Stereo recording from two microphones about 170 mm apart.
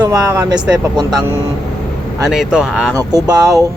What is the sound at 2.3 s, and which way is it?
Speech, 5° right (ahead or behind).